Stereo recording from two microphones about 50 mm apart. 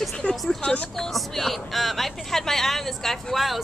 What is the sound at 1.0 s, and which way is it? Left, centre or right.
Speech, centre.